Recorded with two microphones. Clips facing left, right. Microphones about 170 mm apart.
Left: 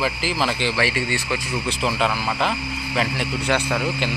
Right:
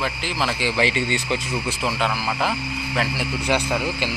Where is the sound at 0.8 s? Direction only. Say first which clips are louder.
Right 1 dB; 20° right (ahead or behind).